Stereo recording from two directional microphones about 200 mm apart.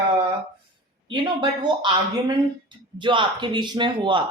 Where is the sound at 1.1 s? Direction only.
25° right (ahead or behind).